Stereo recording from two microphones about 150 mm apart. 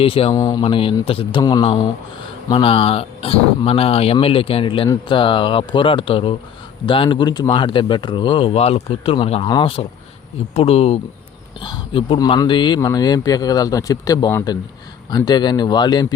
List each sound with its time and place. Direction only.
0.0 s speech: 40° left (ahead or behind)
0.3 s speech: 25° left (ahead or behind)
0.6 s speech: 35° left (ahead or behind)